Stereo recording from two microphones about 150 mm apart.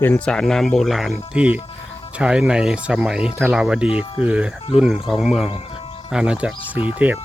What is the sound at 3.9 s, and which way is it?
Speech, 40° left (ahead or behind).